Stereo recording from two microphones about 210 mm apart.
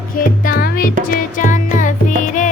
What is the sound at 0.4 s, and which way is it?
Music, 45° left (ahead or behind).